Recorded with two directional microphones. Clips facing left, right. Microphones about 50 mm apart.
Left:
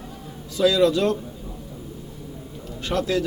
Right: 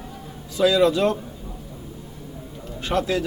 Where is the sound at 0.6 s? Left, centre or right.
Right.